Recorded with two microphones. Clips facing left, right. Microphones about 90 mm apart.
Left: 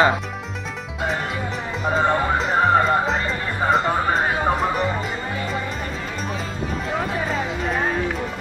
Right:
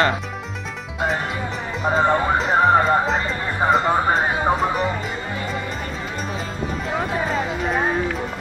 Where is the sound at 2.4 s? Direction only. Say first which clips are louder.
Right 1 dB; centre (ahead or behind).